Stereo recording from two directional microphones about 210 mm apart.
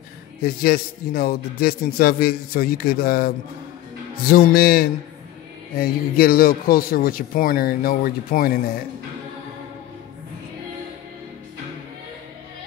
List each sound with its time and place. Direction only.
0.4 s speech: 45° left (ahead or behind)